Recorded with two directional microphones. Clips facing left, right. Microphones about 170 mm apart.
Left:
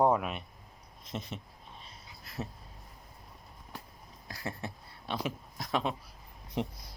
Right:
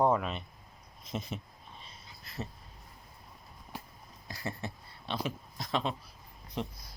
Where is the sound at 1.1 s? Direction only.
5° right (ahead or behind).